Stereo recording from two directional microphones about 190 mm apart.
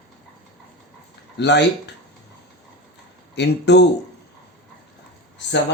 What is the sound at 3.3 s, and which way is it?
Speech, 65° left (ahead or behind).